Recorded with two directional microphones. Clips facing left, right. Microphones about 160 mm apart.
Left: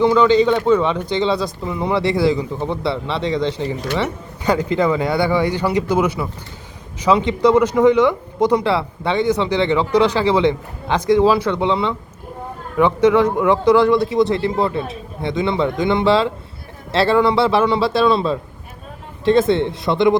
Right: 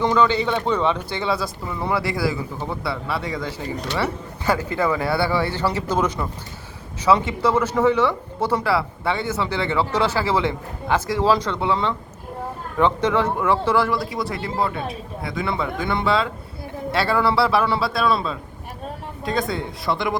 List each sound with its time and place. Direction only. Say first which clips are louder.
0.0 s speech: left 6 dB; 15° left (ahead or behind)